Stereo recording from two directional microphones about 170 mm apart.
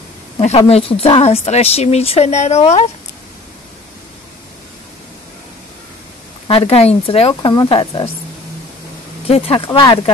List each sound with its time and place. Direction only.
0.4 s speech: 40° left (ahead or behind)
6.4 s speech: 35° left (ahead or behind)
9.7 s speech: 20° left (ahead or behind)